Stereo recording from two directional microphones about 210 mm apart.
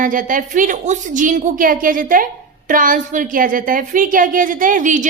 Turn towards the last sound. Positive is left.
turn(degrees=-35)  # may be behind; listen again after turning